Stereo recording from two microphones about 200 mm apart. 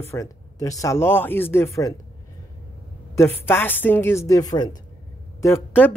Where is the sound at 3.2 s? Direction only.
10° left (ahead or behind).